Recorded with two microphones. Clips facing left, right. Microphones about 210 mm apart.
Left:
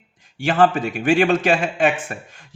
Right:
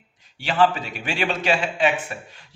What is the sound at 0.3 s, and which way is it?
A man's voice, 50° left (ahead or behind).